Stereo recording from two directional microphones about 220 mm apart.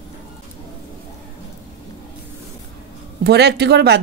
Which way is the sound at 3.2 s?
50° right (ahead or behind).